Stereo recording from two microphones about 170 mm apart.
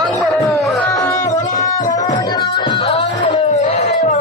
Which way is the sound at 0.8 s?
10° left (ahead or behind).